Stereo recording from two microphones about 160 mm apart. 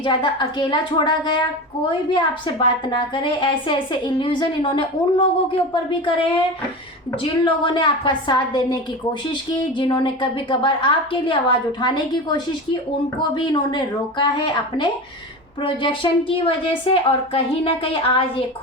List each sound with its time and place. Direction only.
0.0 s a woman's voice: 30° left (ahead or behind)